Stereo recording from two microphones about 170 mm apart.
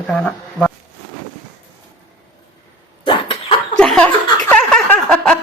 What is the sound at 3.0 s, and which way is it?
Cough, 30° left (ahead or behind).